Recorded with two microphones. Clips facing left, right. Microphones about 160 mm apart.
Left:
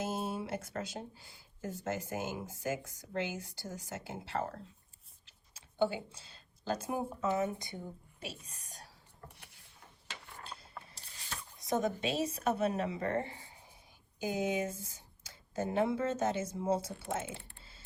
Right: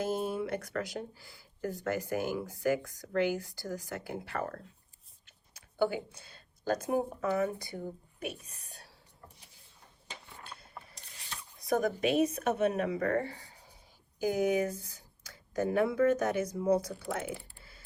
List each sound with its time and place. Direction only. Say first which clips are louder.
0.0 s a sound: right 4 dB; 25° left (ahead or behind)
0.8 s speech: right 4 dB; 25° left (ahead or behind)
4.4 s speech: left 1 dB; 60° right (ahead or behind)
5.8 s speech: right 2 dB; 25° left (ahead or behind)
9.3 s vehicle: left 2 dB; 65° left (ahead or behind)
10.4 s mechanisms: left 1 dB; 30° left (ahead or behind)
10.9 s squish: left 1 dB; 30° left (ahead or behind)
12.5 s speech: right 3 dB; 35° left (ahead or behind)